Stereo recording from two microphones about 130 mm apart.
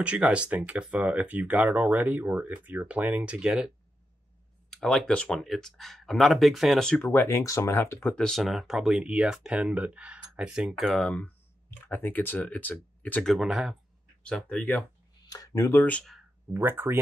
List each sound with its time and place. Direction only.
0.0 s speech: 10° right (ahead or behind)
7.0 s speech: 15° left (ahead or behind); by 11.1 s centre (ahead or behind)
11.8 s speech: 15° left (ahead or behind); by 13.7 s 5° right (ahead or behind)
14.2 s speech: 10° left (ahead or behind)
15.2 s speech: 30° left (ahead or behind)
16.5 s speech: 15° right (ahead or behind)